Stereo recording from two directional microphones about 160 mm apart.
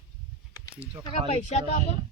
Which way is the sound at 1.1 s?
40° left (ahead or behind).